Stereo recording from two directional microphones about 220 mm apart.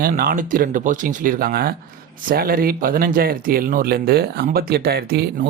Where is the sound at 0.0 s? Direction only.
40° right (ahead or behind).